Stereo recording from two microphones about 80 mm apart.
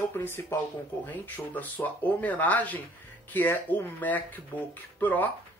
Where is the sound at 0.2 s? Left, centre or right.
Left.